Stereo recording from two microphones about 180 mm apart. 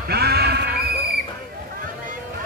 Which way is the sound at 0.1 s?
65° right (ahead or behind).